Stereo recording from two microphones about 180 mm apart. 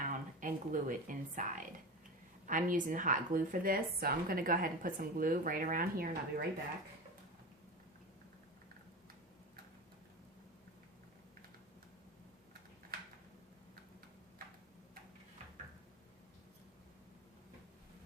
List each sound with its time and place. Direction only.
0.0 s a woman's voice: 45° right (ahead or behind)